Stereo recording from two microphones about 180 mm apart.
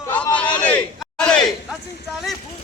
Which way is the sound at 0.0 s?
10° left (ahead or behind).